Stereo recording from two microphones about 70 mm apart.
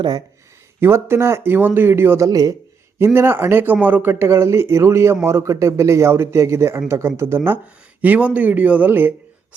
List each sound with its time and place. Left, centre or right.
0.8 s speech: right
2.2 s speech: right
3.0 s speech: right